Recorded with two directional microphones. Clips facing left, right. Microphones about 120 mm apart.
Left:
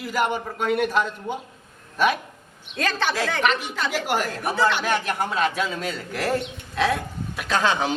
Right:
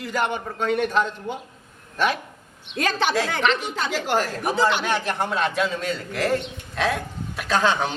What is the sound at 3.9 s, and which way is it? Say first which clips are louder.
Speech: right 2 dB; 10° left (ahead or behind).